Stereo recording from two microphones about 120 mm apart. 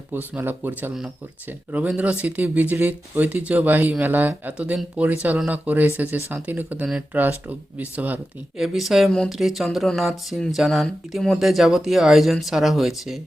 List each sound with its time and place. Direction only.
0.1 s speech: 15° right (ahead or behind)
6.8 s speech: 5° right (ahead or behind)
8.5 s speech: centre (ahead or behind)